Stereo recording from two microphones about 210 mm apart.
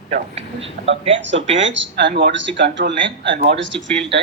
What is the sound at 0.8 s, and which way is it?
Speech, 45° right (ahead or behind).